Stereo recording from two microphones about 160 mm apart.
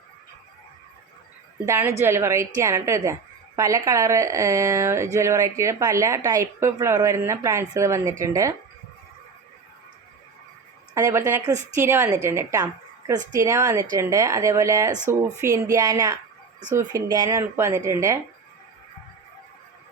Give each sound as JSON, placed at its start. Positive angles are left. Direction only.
{"t": 1.6, "sound": "a woman's voice", "side_deg": -15}
{"t": 10.9, "sound": "a woman's voice", "side_deg": -20}